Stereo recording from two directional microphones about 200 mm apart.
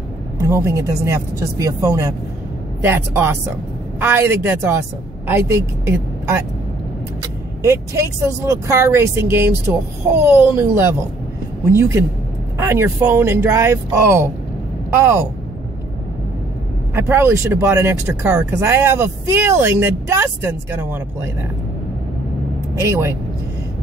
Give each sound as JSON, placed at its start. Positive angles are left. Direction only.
{"t": 0.4, "sound": "speech", "side_deg": -15}
{"t": 7.6, "sound": "speech", "side_deg": -15}
{"t": 16.9, "sound": "speech", "side_deg": -10}
{"t": 22.8, "sound": "speech", "side_deg": -15}